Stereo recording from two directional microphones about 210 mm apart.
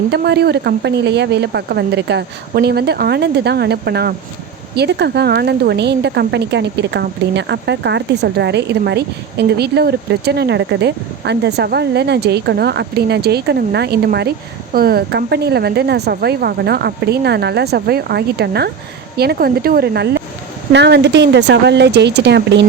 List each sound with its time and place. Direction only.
0.1 s a woman's voice: 50° right (ahead or behind)